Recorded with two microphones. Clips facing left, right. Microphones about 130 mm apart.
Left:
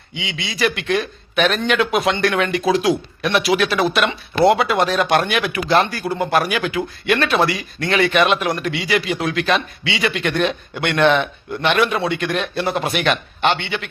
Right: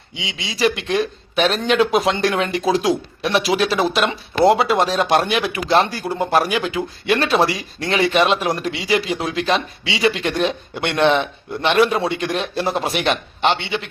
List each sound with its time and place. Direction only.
0.3 s speech: 30° right (ahead or behind)